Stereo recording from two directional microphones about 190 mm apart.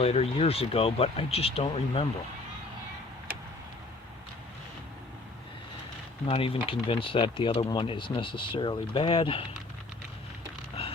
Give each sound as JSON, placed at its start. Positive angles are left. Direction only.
{"t": 0.0, "sound": "speech", "side_deg": 30}
{"t": 6.2, "sound": "speech", "side_deg": 30}